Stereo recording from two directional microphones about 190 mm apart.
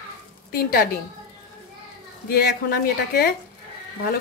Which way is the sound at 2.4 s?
55° left (ahead or behind).